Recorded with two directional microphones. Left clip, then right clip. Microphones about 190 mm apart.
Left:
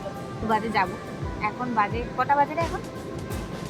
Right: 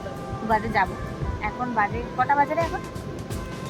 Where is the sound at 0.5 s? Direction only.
Centre (ahead or behind).